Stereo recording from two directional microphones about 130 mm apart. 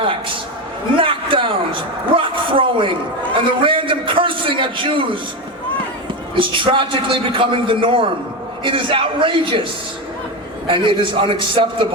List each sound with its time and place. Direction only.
0.9 s a sound: 40° right (ahead or behind)
3.3 s a man's voice: 40° right (ahead or behind)
6.3 s a man's voice: 40° right (ahead or behind)
10.7 s a man's voice: 40° right (ahead or behind)